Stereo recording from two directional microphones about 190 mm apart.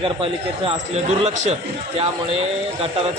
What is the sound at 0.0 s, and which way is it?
Speech, 30° right (ahead or behind).